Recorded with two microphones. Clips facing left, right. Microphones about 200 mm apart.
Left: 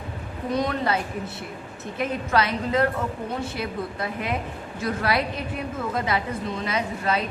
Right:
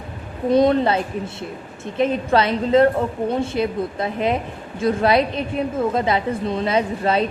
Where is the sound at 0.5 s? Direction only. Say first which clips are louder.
Right 9 dB; 25° right (ahead or behind).